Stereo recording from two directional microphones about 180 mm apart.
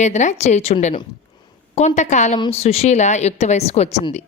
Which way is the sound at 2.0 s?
40° left (ahead or behind).